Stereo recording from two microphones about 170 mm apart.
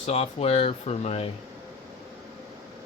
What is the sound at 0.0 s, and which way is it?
Speech, 40° left (ahead or behind).